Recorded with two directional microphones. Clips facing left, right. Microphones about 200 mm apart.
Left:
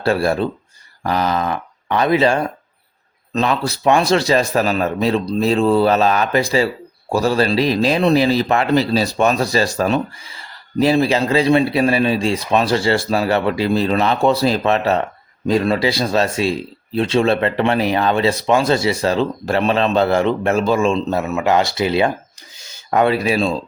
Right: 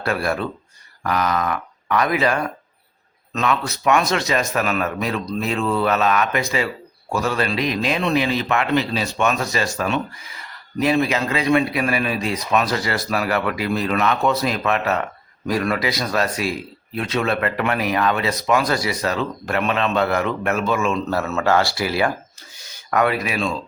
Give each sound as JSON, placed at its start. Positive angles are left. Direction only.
{"t": 0.0, "sound": "a man's voice", "side_deg": 30}